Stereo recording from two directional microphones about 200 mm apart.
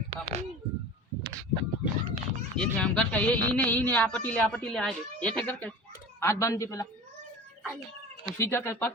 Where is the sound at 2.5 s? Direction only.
5° left (ahead or behind).